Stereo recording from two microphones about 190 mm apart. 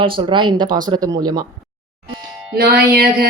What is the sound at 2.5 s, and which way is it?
Music, 55° right (ahead or behind).